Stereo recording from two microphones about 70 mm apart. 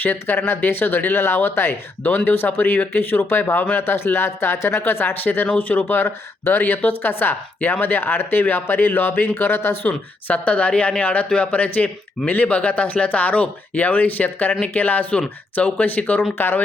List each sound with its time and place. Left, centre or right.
0.0 s speech: left
10.2 s speech: left